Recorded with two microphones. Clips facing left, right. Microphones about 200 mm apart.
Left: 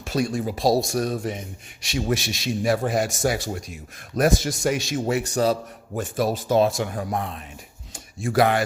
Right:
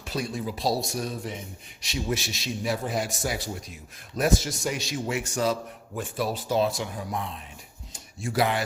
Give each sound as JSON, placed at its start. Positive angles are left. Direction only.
{"t": 0.1, "sound": "speech", "side_deg": 80}
{"t": 0.8, "sound": "speech", "side_deg": 90}
{"t": 1.9, "sound": "a man's voice", "side_deg": 65}
{"t": 2.7, "sound": "a man's voice", "side_deg": 50}
{"t": 3.0, "sound": "speech", "side_deg": 85}
{"t": 4.1, "sound": "a man's voice", "side_deg": 50}